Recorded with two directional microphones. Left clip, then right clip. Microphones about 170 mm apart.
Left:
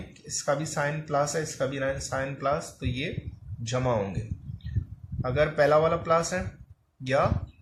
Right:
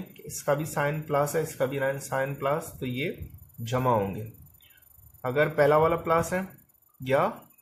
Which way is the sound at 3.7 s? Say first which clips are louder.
Right 2 dB; 50° right (ahead or behind).